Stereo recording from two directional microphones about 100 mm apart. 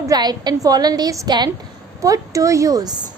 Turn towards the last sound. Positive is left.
turn(degrees=-40)  # may be behind; listen again after turning